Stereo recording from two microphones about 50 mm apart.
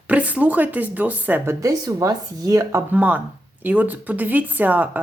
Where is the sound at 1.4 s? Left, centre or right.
Right.